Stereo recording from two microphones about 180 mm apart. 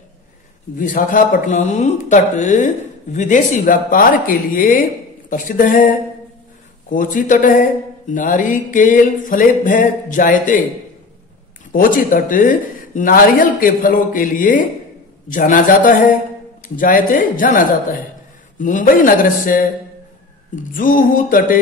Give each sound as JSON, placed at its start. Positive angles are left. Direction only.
{"t": 0.7, "sound": "speech", "side_deg": 50}
{"t": 11.7, "sound": "speech", "side_deg": 50}